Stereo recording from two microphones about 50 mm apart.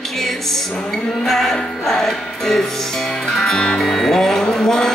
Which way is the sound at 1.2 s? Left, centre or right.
Centre.